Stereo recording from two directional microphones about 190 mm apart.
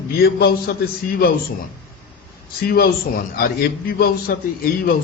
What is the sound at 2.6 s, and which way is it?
A man's voice, 55° left (ahead or behind).